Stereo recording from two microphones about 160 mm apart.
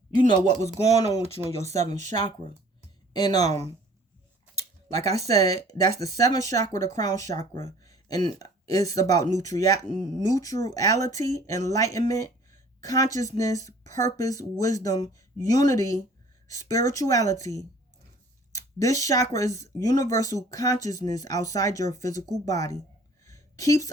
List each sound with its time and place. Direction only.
0.4 s speech: 45° right (ahead or behind)
3.1 s speech: 25° left (ahead or behind)
5.3 s speech: 20° left (ahead or behind)
23.2 s a sound: 20° left (ahead or behind)